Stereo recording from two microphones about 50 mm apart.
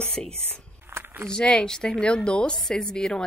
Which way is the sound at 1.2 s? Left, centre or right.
Centre.